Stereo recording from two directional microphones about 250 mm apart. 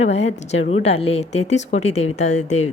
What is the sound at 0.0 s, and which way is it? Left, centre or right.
A woman's voice, left.